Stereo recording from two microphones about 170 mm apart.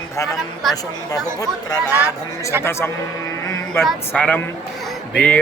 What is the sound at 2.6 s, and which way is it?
Speech, 15° left (ahead or behind).